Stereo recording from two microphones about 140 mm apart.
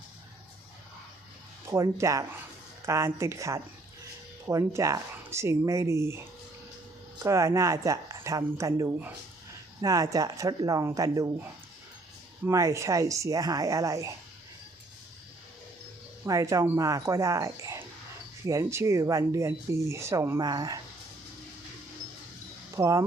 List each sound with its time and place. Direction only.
1.7 s speech: 20° right (ahead or behind)
12.5 s speech: 20° right (ahead or behind)
16.2 s speech: 25° right (ahead or behind)
22.7 s speech: 25° right (ahead or behind)